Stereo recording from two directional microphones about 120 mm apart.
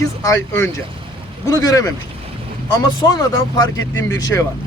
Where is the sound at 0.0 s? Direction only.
25° left (ahead or behind).